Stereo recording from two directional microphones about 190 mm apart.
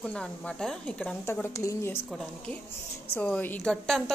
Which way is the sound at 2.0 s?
5° left (ahead or behind).